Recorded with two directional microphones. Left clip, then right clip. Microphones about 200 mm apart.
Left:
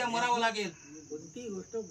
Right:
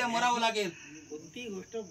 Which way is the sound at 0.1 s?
15° left (ahead or behind).